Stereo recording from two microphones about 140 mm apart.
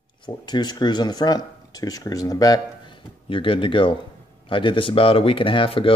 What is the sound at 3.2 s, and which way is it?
Speech, 40° left (ahead or behind).